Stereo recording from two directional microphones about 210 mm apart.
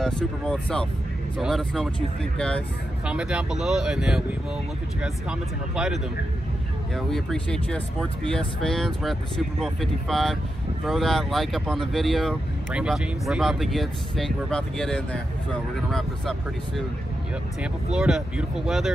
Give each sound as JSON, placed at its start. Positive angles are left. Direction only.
{"t": 0.0, "sound": "speech", "side_deg": 5}
{"t": 7.0, "sound": "speech", "side_deg": 0}
{"t": 17.9, "sound": "speech", "side_deg": 0}